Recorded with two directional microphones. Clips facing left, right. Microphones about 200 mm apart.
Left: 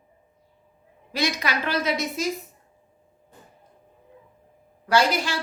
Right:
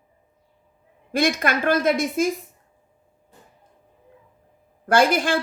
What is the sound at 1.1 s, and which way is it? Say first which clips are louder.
A woman's voice: right 5 dB; 50° right (ahead or behind).